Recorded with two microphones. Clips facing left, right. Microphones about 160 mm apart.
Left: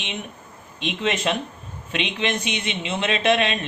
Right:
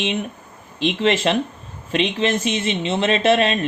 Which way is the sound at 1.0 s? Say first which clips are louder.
Right 5 dB; 35° right (ahead or behind).